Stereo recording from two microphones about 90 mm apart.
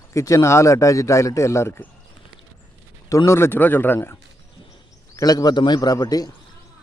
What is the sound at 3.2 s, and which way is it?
Speech, 30° left (ahead or behind).